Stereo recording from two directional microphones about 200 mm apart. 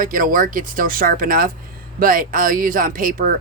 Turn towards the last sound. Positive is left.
turn(degrees=-45)  # may be behind; listen again after turning